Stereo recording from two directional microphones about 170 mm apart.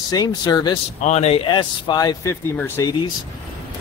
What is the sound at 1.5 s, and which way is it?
Speech, 25° left (ahead or behind).